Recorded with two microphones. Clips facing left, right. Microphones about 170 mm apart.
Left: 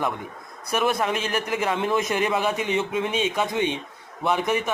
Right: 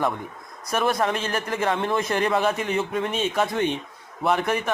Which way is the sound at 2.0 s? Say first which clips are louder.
Even; 15° left (ahead or behind).